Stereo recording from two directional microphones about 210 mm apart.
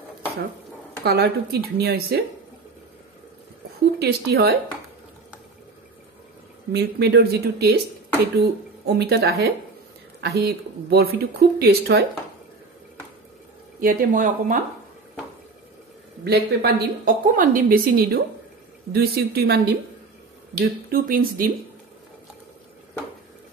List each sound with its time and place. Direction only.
1.0 s a woman's voice: 50° right (ahead or behind)
4.0 s a woman's voice: 50° right (ahead or behind)
6.7 s a woman's voice: 50° right (ahead or behind)
13.7 s speech: 40° right (ahead or behind)
16.3 s a woman's voice: 45° right (ahead or behind)